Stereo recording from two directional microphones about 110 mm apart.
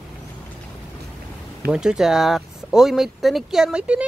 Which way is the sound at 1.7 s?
5° right (ahead or behind).